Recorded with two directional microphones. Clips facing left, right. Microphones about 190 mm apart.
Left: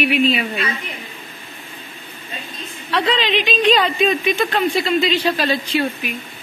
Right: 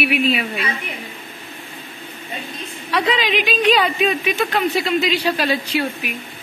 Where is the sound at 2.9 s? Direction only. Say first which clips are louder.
Even; 10° right (ahead or behind).